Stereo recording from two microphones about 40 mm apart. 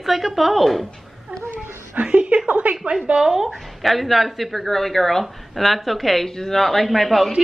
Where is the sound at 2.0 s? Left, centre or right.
Right.